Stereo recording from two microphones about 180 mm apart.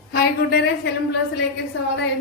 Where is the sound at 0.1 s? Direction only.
60° left (ahead or behind).